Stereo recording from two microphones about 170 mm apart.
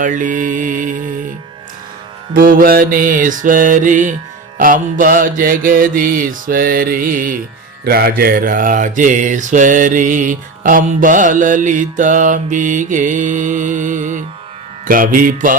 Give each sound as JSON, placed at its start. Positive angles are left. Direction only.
{"t": 0.0, "sound": "mantra", "side_deg": -50}
{"t": 2.3, "sound": "mantra", "side_deg": -55}